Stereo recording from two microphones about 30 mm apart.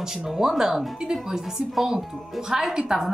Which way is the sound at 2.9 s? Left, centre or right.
Centre.